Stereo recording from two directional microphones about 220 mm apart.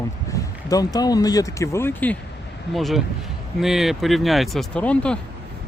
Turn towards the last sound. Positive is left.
turn(degrees=5)  # may be behind; listen again after turning